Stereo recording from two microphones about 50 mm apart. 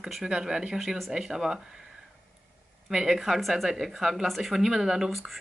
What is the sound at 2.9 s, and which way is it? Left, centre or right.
Speech, centre.